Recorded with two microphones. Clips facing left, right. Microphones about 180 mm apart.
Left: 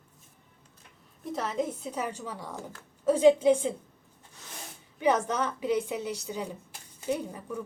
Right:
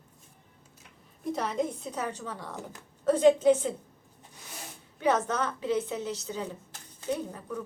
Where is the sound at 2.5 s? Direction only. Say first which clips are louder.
Even; 15° right (ahead or behind).